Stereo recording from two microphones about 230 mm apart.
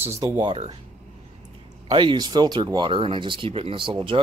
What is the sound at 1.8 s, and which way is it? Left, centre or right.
Speech, centre.